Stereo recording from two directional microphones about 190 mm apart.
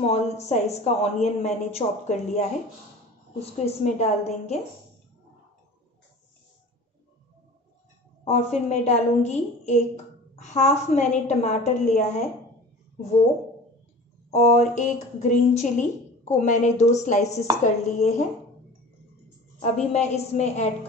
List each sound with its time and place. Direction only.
0.0 s a woman's voice: 35° left (ahead or behind)
8.3 s a woman's voice: 35° left (ahead or behind)
14.3 s a woman's voice: 40° left (ahead or behind)
19.6 s a woman's voice: 35° left (ahead or behind)